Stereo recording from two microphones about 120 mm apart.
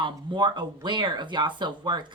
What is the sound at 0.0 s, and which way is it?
Speech, 40° right (ahead or behind).